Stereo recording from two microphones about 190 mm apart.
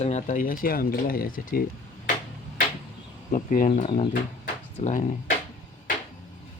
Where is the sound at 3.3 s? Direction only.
40° left (ahead or behind).